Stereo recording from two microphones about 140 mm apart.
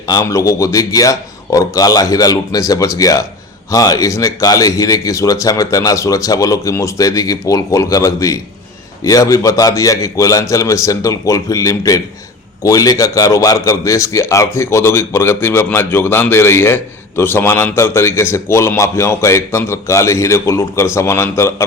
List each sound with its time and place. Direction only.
0.1 s speech: 25° left (ahead or behind)